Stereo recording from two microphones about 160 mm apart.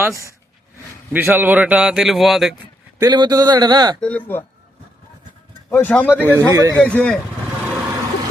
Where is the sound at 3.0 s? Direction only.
25° right (ahead or behind).